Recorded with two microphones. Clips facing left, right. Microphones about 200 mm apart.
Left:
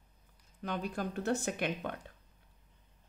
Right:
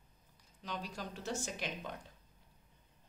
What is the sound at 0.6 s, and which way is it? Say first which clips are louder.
Speech: left 7 dB; 55° left (ahead or behind).